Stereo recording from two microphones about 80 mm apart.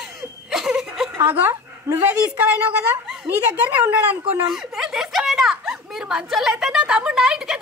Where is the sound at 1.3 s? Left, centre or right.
Right.